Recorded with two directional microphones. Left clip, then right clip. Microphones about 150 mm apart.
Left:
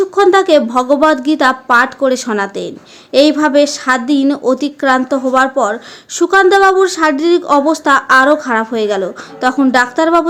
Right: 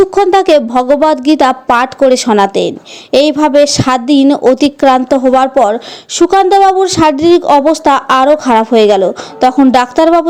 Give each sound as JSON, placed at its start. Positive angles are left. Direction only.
{"t": 0.0, "sound": "a woman's voice", "side_deg": -35}